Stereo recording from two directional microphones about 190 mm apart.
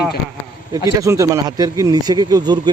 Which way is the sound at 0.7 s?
15° right (ahead or behind).